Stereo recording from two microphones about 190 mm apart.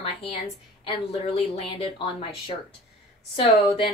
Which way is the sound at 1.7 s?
30° left (ahead or behind).